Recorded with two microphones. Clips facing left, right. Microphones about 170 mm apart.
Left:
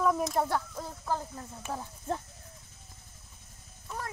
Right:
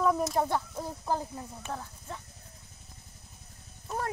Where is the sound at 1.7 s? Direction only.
5° left (ahead or behind).